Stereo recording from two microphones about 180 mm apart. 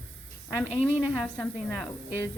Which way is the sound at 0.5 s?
5° right (ahead or behind).